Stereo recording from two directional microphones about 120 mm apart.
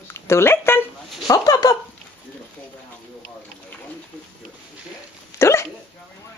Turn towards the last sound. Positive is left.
turn(degrees=25)  # may be behind; listen again after turning